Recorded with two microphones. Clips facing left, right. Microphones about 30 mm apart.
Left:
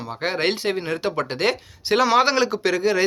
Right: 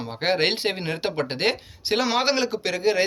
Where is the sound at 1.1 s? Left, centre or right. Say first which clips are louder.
Left 1 dB; centre.